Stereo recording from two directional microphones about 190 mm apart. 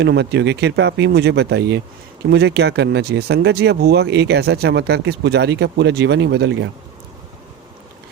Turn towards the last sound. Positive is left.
turn(degrees=-70)  # may be behind; listen again after turning